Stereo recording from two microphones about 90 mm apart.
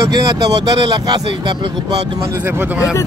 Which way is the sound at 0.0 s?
40° right (ahead or behind).